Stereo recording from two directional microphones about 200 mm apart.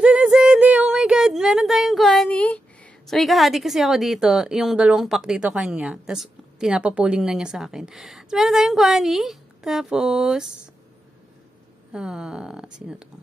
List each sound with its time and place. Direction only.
0.0 s speech: 5° right (ahead or behind)
11.9 s speech: 5° right (ahead or behind)